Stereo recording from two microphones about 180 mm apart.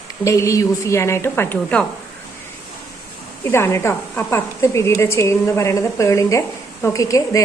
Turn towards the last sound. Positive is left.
turn(degrees=20)  # may be behind; listen again after turning